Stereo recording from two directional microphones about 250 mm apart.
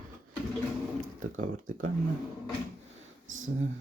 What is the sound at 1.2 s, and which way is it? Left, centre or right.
Speech, right.